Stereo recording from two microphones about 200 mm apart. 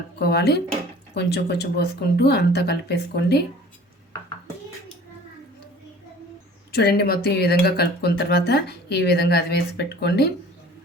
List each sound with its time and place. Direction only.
0.2 s speech: 55° left (ahead or behind)
6.7 s speech: 50° left (ahead or behind)